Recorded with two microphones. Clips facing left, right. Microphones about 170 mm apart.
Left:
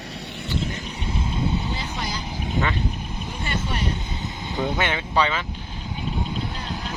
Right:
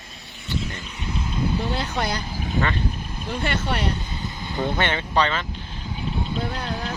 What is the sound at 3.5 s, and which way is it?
Speech, 70° right (ahead or behind).